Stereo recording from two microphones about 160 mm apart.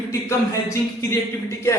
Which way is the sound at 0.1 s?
20° left (ahead or behind).